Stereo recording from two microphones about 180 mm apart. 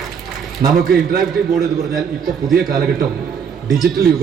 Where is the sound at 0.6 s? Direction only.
50° right (ahead or behind).